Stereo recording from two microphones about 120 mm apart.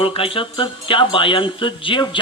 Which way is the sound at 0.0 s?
50° left (ahead or behind).